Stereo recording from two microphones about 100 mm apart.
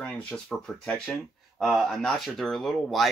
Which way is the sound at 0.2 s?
10° left (ahead or behind).